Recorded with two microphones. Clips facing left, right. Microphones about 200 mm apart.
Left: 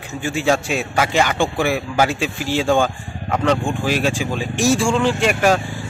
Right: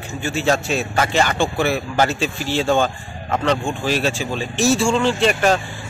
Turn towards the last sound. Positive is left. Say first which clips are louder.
# even
turn(degrees=10)  # may be behind; listen again after turning